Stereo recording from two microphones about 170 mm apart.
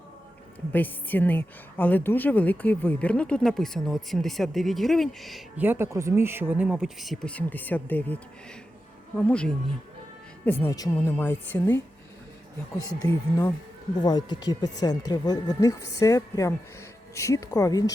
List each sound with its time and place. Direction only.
0.7 s a woman's voice: 10° left (ahead or behind)
5.5 s a woman's voice: 15° right (ahead or behind); by 11.1 s 25° left (ahead or behind)
11.2 s a woman's voice: 10° left (ahead or behind)
12.8 s speech: 20° left (ahead or behind)